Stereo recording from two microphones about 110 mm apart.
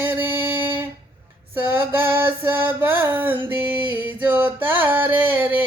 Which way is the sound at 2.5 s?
15° right (ahead or behind).